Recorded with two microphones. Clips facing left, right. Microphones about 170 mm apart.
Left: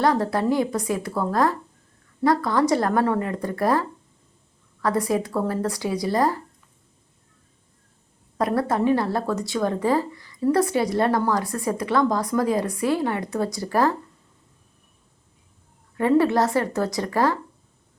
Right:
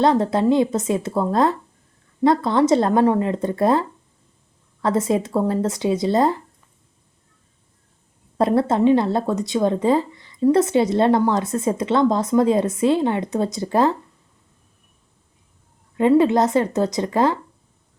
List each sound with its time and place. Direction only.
0.0 s speech: 20° right (ahead or behind)
8.4 s speech: 25° right (ahead or behind)
16.0 s speech: 20° right (ahead or behind)